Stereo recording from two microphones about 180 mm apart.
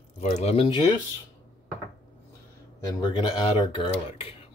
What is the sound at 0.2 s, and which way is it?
Speech, 35° left (ahead or behind).